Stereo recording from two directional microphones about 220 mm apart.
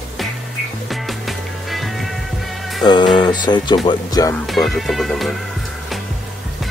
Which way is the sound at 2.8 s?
20° left (ahead or behind).